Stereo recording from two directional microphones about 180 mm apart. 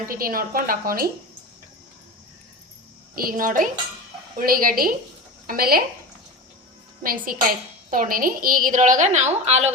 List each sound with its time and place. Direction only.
0.0 s a woman's voice: 55° right (ahead or behind)
3.2 s a woman's voice: 50° right (ahead or behind)
7.0 s a woman's voice: 50° right (ahead or behind); by 9.7 s 35° right (ahead or behind)